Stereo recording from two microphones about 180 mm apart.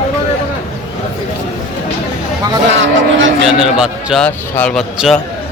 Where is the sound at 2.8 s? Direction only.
90° right.